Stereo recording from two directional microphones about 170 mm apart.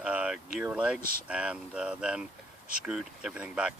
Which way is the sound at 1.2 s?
5° right (ahead or behind).